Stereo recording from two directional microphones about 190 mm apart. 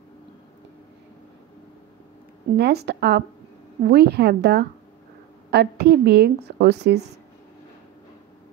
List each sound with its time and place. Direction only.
2.5 s a woman's voice: 55° right (ahead or behind)